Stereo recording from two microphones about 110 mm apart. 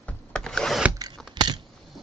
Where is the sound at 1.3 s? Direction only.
40° right (ahead or behind).